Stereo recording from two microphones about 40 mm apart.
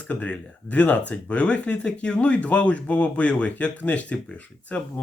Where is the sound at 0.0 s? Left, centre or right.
Left.